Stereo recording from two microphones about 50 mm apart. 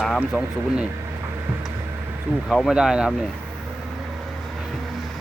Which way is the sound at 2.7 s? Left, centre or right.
Centre.